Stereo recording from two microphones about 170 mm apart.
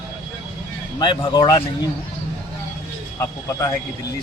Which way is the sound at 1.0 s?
25° left (ahead or behind).